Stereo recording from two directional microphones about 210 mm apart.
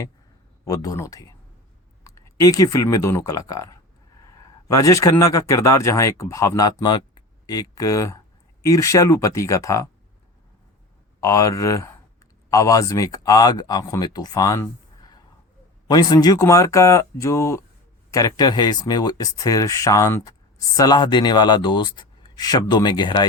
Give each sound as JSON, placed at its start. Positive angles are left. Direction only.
{"t": 0.6, "sound": "speech", "side_deg": 15}
{"t": 11.2, "sound": "speech", "side_deg": 15}